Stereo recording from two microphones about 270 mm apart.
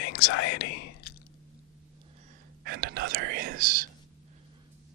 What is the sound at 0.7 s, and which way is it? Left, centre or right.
Speech, left.